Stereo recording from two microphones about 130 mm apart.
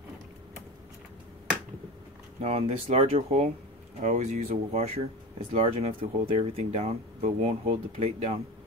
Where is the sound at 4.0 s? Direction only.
70° right (ahead or behind).